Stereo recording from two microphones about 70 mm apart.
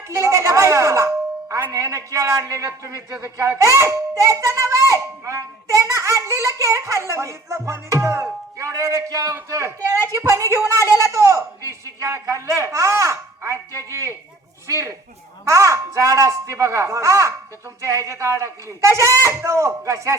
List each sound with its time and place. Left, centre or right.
0.1 s speech: right